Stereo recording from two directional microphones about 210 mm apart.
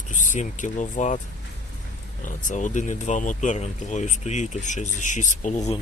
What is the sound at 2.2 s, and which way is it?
Speech, 35° left (ahead or behind).